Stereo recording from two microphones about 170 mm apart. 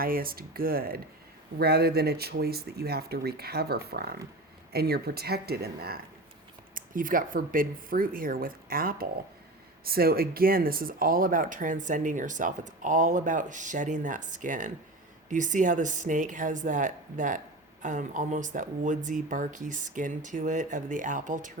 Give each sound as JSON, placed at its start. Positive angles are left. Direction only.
{"t": 0.0, "sound": "speech", "side_deg": -60}
{"t": 6.7, "sound": "speech", "side_deg": -55}